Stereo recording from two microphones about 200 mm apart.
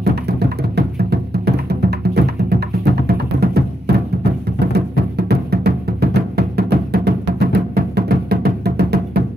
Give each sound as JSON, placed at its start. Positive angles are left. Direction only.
{"t": 0.0, "sound": "music", "side_deg": -55}